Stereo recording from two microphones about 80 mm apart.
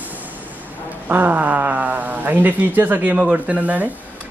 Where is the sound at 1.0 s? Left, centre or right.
Right.